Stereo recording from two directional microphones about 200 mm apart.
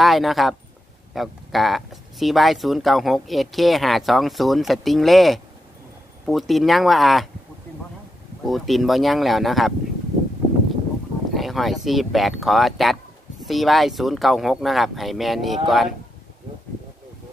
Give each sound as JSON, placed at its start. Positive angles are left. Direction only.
{"t": 0.0, "sound": "speech", "side_deg": 0}
{"t": 8.5, "sound": "speech", "side_deg": 0}
{"t": 11.3, "sound": "speech", "side_deg": 0}